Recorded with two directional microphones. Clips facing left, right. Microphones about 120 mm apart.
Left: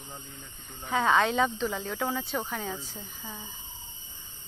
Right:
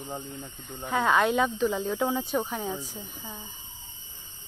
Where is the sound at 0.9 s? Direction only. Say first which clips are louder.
Right 1 dB; 5° right (ahead or behind).